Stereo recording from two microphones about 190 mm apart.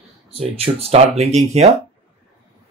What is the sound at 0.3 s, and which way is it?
Speech, 30° right (ahead or behind).